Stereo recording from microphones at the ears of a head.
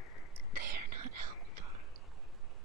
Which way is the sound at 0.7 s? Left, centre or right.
Right.